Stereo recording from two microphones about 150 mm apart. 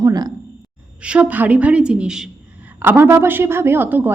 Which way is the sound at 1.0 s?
5° right (ahead or behind).